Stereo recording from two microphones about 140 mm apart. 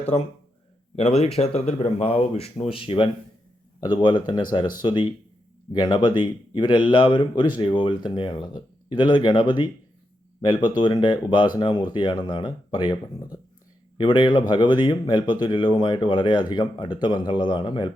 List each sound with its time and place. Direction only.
0.9 s speech: 50° left (ahead or behind)
10.8 s speech: 35° left (ahead or behind)